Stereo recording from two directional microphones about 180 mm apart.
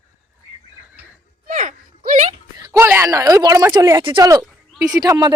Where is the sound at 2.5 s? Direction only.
20° right (ahead or behind).